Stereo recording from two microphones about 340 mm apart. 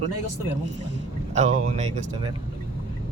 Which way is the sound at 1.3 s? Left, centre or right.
Right.